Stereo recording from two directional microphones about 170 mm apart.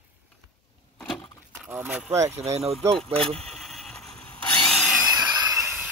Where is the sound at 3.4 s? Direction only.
Centre (ahead or behind).